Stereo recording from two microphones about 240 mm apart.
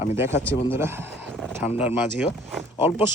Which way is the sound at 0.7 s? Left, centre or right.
Centre.